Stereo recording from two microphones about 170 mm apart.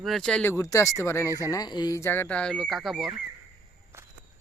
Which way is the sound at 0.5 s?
15° left (ahead or behind).